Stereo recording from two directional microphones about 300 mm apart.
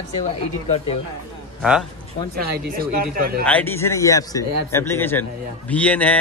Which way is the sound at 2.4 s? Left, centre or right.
Right.